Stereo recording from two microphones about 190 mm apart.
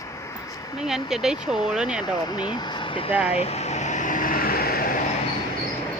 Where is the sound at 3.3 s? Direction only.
35° left (ahead or behind); by 4.9 s 50° left (ahead or behind).